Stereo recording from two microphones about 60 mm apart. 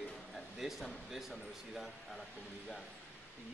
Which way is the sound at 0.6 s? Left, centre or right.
Centre.